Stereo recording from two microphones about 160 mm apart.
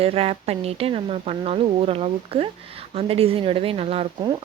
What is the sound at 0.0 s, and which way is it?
Speech, 40° right (ahead or behind).